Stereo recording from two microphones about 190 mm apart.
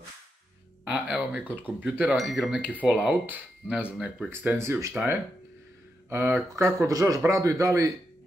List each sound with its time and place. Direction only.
0.8 s speech: 5° right (ahead or behind)